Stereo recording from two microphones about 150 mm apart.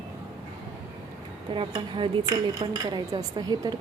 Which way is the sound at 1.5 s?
35° right (ahead or behind).